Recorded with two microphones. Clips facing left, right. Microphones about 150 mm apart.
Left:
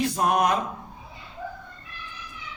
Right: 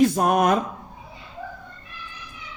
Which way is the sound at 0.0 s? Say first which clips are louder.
Right 4 dB; 50° right (ahead or behind).